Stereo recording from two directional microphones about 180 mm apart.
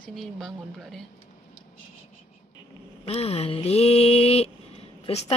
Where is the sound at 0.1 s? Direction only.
Centre (ahead or behind).